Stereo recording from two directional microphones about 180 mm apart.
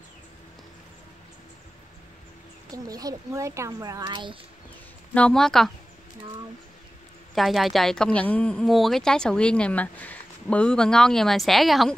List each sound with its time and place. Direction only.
2.7 s a child's voice: 20° right (ahead or behind)
5.1 s speech: 5° left (ahead or behind)
7.3 s speech: centre (ahead or behind)